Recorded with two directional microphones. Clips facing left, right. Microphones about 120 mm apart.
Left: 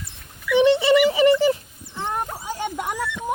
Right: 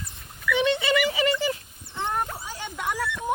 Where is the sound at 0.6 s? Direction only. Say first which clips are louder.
Left 8 dB; 30° left (ahead or behind).